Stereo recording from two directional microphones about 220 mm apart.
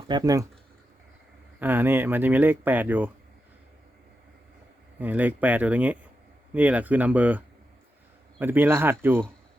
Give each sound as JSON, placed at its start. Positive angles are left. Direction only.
{"t": 0.1, "sound": "speech", "side_deg": -15}
{"t": 1.5, "sound": "speech", "side_deg": -10}
{"t": 4.9, "sound": "speech", "side_deg": -5}